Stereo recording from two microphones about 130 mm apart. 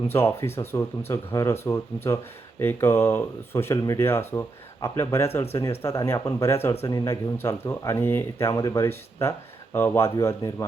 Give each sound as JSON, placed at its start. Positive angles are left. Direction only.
{"t": 0.1, "sound": "speech", "side_deg": 20}